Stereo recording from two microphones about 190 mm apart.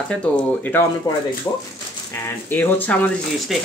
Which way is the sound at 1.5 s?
15° left (ahead or behind).